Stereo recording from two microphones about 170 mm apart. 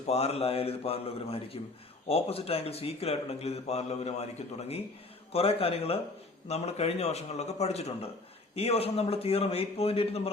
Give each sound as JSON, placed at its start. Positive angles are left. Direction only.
{"t": 0.1, "sound": "a man's voice", "side_deg": 35}